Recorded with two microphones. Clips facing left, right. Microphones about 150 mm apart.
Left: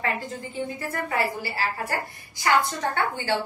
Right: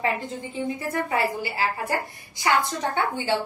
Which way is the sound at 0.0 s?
20° right (ahead or behind).